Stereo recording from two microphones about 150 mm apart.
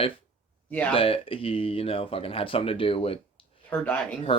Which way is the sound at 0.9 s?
35° left (ahead or behind).